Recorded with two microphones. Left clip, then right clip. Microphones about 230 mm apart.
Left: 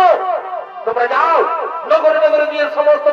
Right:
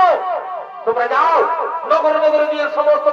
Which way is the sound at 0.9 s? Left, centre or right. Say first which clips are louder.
Left 1 dB; left.